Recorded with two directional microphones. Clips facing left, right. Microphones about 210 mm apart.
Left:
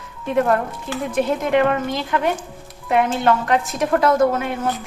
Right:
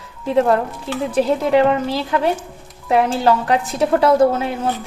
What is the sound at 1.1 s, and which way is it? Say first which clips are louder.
A woman's voice: right 3 dB; 30° right (ahead or behind).